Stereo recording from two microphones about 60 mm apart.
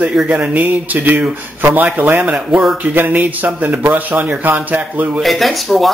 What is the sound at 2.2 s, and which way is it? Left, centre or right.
Speech, right.